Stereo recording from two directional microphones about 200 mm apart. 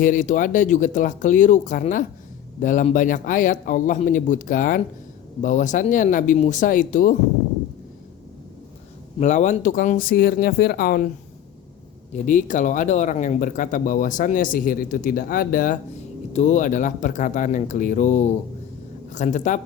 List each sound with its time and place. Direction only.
0.0 s speech: 40° left (ahead or behind)
9.1 s speech: 35° left (ahead or behind)
12.1 s speech: 40° left (ahead or behind)